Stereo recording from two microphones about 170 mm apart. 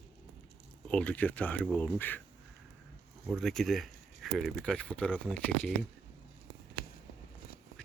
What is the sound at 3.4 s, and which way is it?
Speech, centre (ahead or behind).